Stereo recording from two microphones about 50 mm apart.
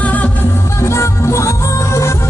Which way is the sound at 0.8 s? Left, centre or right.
Left.